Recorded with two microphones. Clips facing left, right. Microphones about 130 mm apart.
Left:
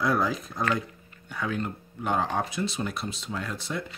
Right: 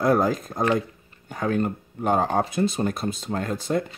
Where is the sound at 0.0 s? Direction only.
45° right (ahead or behind).